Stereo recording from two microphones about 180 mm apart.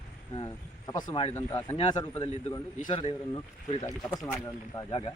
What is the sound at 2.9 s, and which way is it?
Speech, 30° left (ahead or behind).